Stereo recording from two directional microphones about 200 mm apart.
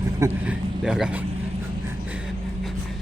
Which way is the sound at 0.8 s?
5° right (ahead or behind).